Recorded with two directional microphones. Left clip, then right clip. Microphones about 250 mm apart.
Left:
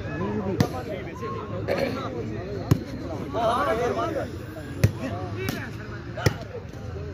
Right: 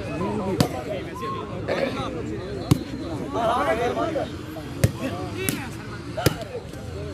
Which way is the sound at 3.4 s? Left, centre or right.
Left.